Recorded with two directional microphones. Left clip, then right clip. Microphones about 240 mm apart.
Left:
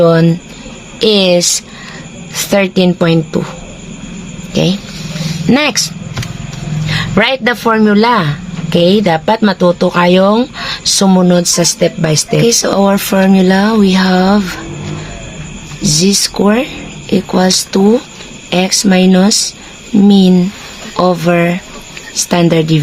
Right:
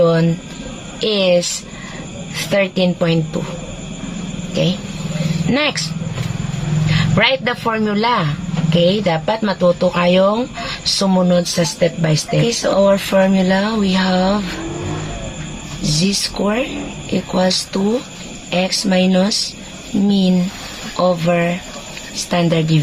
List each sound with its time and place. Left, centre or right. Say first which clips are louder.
0.0 s a man's voice: left 5 dB; left
5.5 s a man's voice: left 6 dB; left
6.8 s a man's voice: left 4 dB; left
15.8 s a man's voice: left 7 dB; left